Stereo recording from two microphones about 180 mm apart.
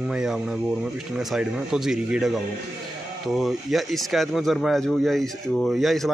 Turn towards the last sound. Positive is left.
turn(degrees=0)  # may be behind; listen again after turning